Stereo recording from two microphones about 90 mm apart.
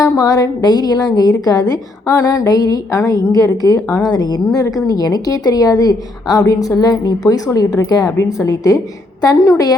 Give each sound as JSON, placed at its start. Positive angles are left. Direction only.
{"t": 0.0, "sound": "a woman's voice", "side_deg": 40}